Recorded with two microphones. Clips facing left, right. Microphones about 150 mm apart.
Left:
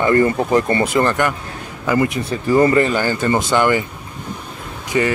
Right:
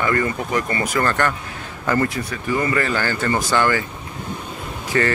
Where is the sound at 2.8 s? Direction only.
20° left (ahead or behind).